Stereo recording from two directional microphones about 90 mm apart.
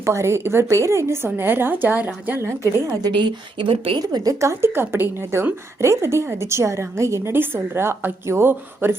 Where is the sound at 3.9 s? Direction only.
45° right (ahead or behind).